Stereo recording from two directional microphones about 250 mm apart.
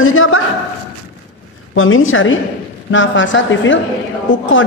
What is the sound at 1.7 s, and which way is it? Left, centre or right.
A woman's voice, left.